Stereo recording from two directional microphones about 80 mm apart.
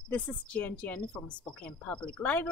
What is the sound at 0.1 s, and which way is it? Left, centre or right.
Speech, centre.